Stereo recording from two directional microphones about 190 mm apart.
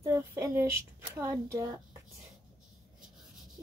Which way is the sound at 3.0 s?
Centre (ahead or behind).